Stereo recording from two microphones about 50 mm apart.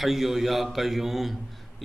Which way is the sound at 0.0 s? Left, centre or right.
Centre.